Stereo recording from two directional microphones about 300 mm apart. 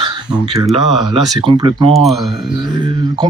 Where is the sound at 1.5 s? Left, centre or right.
Centre.